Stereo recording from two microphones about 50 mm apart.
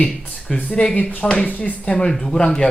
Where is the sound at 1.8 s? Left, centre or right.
Left.